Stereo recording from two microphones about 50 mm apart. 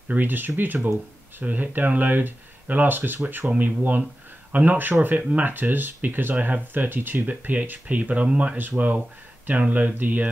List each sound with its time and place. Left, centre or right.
0.1 s speech: right
8.5 s speech: right